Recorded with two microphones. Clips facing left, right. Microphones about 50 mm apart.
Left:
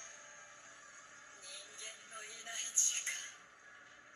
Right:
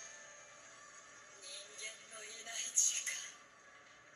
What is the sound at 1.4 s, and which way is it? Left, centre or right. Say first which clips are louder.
Music: right 3 dB; left.